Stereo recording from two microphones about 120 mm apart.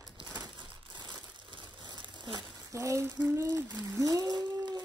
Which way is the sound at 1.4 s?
40° right (ahead or behind).